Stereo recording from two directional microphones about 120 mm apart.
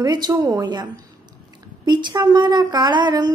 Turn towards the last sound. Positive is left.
turn(degrees=-35)  # may be behind; listen again after turning